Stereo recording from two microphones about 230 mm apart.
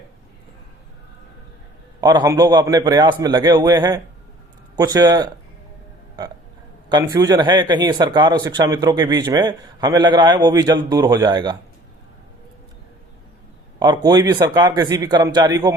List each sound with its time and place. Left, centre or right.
2.0 s a man's voice: centre
6.9 s speech: centre
13.7 s a man's voice: centre